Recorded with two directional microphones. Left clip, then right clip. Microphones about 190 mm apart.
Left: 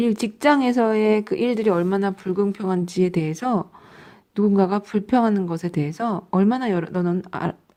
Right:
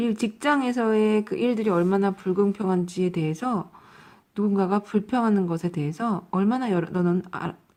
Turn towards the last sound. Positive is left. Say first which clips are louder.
# left 2 dB
turn(degrees=30)  # may be behind; listen again after turning